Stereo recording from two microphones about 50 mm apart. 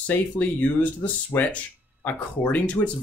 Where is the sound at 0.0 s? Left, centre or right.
Left.